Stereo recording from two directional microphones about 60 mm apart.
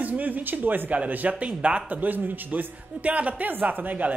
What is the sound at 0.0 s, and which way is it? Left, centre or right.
A man's voice, right.